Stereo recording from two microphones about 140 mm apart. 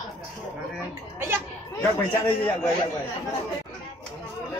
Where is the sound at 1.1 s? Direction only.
15° right (ahead or behind).